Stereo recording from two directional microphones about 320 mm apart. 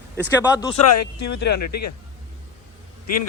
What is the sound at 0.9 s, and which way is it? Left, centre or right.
Speech, left.